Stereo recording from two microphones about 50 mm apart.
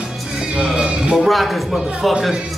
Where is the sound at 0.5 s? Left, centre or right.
Right.